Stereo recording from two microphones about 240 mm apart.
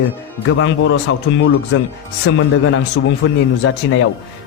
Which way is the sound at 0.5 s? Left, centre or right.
Left.